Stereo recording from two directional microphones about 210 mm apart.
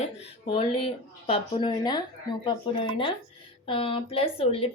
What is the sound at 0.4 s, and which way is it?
A woman's voice, 25° left (ahead or behind).